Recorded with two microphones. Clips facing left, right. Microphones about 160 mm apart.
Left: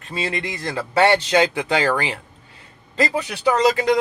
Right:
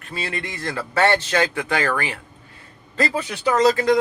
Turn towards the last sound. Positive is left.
turn(degrees=20)  # may be behind; listen again after turning